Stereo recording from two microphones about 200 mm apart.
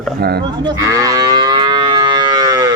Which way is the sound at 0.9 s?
15° right (ahead or behind).